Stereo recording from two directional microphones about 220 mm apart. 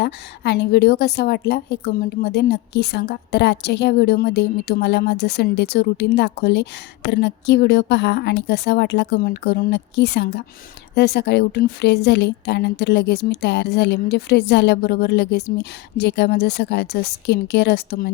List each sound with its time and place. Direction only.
0.0 s a woman's voice: 50° left (ahead or behind)